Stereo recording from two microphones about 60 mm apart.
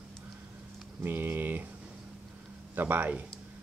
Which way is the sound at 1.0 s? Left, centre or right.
Right.